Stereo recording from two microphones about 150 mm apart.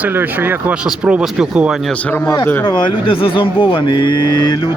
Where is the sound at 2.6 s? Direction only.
30° left (ahead or behind).